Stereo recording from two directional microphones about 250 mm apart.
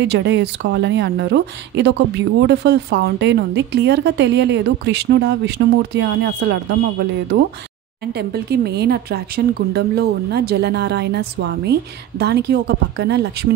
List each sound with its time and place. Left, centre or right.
0.0 s speech: right
8.1 s speech: right